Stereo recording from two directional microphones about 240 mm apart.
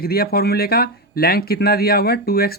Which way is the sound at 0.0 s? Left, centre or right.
Left.